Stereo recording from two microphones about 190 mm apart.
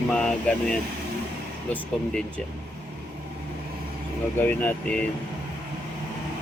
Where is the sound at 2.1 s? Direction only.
5° left (ahead or behind).